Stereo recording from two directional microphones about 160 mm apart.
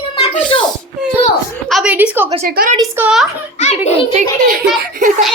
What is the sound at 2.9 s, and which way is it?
Speech, 5° right (ahead or behind).